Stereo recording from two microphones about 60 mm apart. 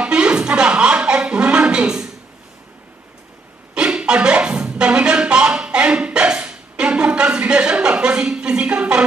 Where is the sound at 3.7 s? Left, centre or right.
Centre.